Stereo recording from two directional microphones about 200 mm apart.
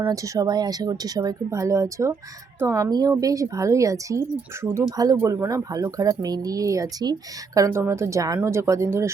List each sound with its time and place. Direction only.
0.0 s a woman's voice: 15° right (ahead or behind)